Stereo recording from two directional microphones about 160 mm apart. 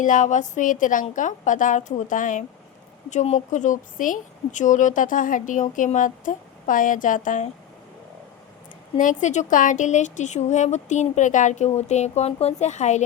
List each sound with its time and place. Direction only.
0.0 s a woman's voice: 55° left (ahead or behind)
9.0 s a woman's voice: 50° left (ahead or behind)